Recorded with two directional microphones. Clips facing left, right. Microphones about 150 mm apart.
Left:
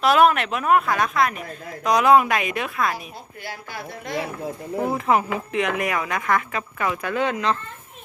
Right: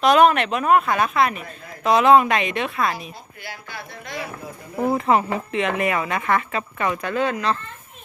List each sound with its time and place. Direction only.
0.0 s a woman's voice: 5° left (ahead or behind)
3.4 s speech: 45° left (ahead or behind)
4.9 s a woman's voice: centre (ahead or behind)
7.1 s speech: 15° left (ahead or behind)